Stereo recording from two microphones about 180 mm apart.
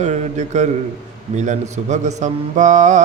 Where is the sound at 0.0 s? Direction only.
40° right (ahead or behind).